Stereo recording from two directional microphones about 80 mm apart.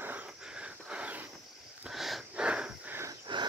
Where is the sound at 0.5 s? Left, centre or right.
Centre.